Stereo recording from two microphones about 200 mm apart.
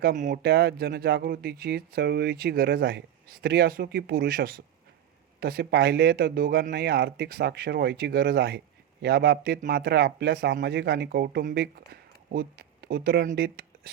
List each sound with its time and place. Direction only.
0.0 s speech: 40° right (ahead or behind)